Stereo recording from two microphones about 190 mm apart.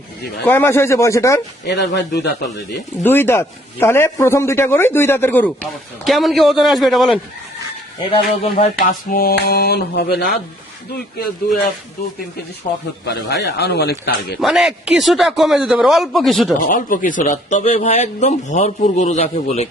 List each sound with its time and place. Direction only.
0.4 s a man's voice: 10° left (ahead or behind)
1.6 s speech: 65° left (ahead or behind)
3.0 s a man's voice: 10° left (ahead or behind)
8.5 s speech: 40° left (ahead or behind); by 10.2 s 60° left (ahead or behind)
12.7 s a man's voice: 35° left (ahead or behind)
13.1 s speech: 65° left (ahead or behind)
14.4 s a man's voice: centre (ahead or behind)
16.6 s a man's voice: 45° left (ahead or behind)